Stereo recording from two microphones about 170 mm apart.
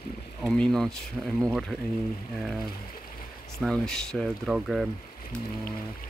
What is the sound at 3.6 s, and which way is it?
Speech, centre (ahead or behind).